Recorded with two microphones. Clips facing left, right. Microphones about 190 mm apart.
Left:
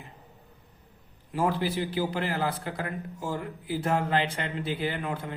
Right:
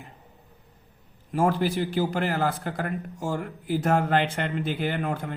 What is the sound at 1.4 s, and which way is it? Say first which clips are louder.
A man's voice: right 4 dB; 50° right (ahead or behind).